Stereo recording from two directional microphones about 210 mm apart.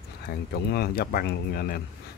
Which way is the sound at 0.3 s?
50° left (ahead or behind).